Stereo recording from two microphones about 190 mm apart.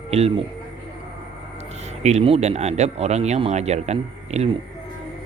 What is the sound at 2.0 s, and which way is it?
Speech, 35° right (ahead or behind).